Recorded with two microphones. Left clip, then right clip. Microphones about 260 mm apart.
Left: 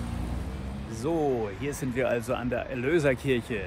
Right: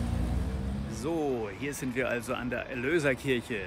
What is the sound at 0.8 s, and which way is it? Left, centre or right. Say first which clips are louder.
Speech: left 4 dB; centre.